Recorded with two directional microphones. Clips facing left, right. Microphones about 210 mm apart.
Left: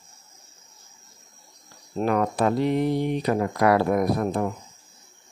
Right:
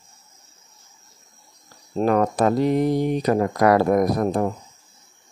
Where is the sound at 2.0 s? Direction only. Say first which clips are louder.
Right 4 dB; 40° right (ahead or behind).